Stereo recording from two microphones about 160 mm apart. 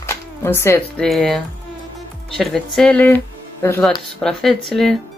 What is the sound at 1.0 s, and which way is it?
Speech, centre (ahead or behind).